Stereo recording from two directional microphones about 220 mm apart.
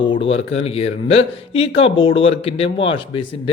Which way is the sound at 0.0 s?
25° left (ahead or behind).